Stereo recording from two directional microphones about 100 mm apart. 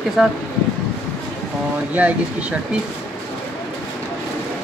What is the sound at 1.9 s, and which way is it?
Speech, 15° right (ahead or behind).